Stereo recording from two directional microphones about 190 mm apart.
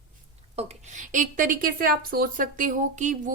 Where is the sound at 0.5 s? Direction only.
40° right (ahead or behind).